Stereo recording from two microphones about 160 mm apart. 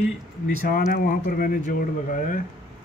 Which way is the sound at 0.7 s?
65° left (ahead or behind).